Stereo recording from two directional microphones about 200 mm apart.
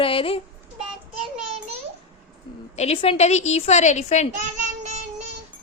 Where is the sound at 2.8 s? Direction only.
30° left (ahead or behind).